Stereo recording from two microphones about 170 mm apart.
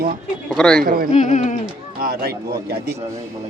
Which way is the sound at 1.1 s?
40° left (ahead or behind).